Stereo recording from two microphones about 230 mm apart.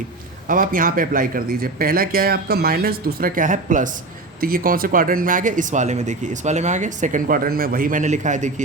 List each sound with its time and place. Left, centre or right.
0.4 s speech: right